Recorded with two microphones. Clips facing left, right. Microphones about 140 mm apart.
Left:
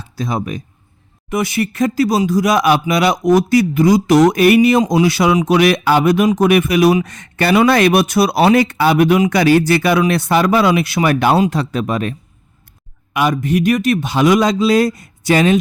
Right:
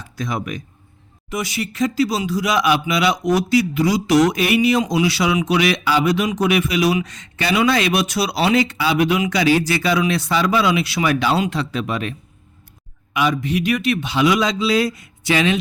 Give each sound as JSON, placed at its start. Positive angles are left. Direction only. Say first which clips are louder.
{"t": 0.2, "sound": "speech", "louder": "left 4 dB", "side_deg": 30}
{"t": 1.3, "sound": "speech", "louder": "left 7 dB", "side_deg": 55}
{"t": 13.1, "sound": "speech", "louder": "left 4 dB", "side_deg": 50}